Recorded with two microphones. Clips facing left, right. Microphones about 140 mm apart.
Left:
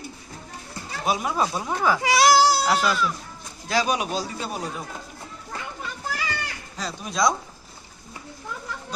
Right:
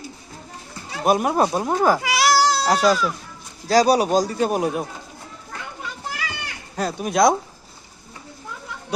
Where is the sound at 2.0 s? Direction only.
30° left (ahead or behind).